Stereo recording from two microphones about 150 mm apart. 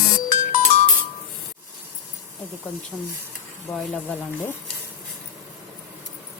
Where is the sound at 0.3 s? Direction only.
60° left (ahead or behind).